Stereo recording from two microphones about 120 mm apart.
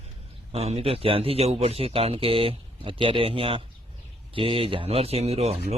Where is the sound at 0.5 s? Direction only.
55° right (ahead or behind).